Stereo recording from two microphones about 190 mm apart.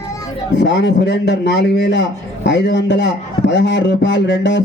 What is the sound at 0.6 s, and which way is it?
A man's voice, 65° left (ahead or behind).